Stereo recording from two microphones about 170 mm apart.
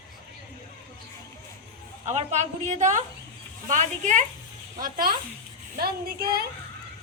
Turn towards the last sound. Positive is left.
turn(degrees=-60)  # may be behind; listen again after turning